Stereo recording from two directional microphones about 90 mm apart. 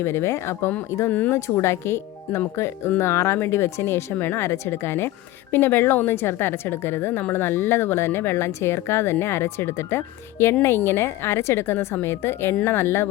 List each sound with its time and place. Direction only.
0.0 s speech: 30° left (ahead or behind)